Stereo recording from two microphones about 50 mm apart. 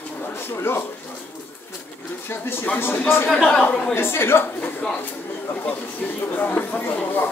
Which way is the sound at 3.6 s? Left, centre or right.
Left.